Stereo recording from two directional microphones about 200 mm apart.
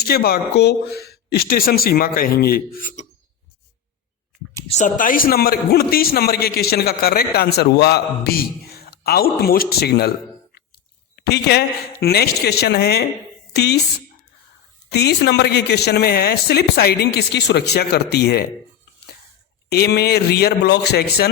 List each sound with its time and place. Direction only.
0.0 s a man's voice: 50° left (ahead or behind)
4.8 s a man's voice: 45° left (ahead or behind)
11.2 s a man's voice: 55° left (ahead or behind)
14.9 s speech: 55° left (ahead or behind)
19.7 s a man's voice: 55° left (ahead or behind)